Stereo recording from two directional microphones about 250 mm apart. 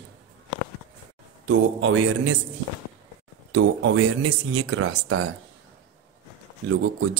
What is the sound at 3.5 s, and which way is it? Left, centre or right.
Speech, right.